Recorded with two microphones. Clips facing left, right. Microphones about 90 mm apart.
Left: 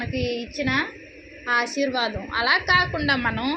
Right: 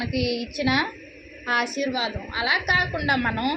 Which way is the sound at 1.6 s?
45° right (ahead or behind).